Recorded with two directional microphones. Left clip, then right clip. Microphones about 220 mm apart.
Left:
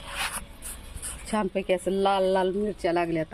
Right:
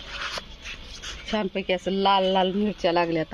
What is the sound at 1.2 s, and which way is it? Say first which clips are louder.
Speech: even; 5° left (ahead or behind).